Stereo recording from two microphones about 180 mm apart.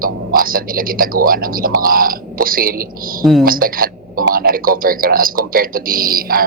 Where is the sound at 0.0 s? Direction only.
50° right (ahead or behind).